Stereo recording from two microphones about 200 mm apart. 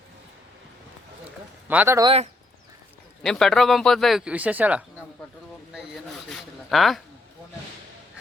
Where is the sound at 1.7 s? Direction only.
10° right (ahead or behind).